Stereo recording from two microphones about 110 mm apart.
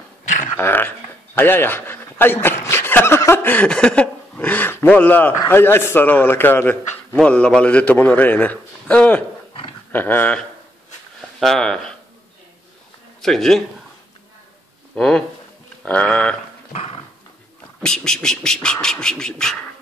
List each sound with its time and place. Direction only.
0.6 s a sound: 20° left (ahead or behind)
2.4 s a man's voice: 20° left (ahead or behind)
11.1 s speech: centre (ahead or behind)
13.2 s speech: 5° left (ahead or behind)
15.0 s a man's voice: 5° left (ahead or behind)
17.8 s a man's voice: 5° left (ahead or behind)